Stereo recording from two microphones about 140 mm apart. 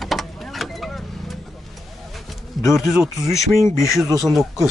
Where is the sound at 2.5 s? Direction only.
Centre (ahead or behind).